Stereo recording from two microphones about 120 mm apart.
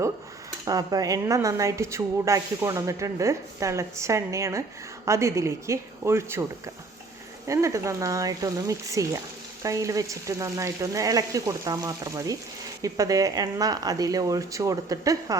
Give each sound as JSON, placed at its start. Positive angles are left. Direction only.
{"t": 0.6, "sound": "speech", "side_deg": -30}
{"t": 7.4, "sound": "speech", "side_deg": -25}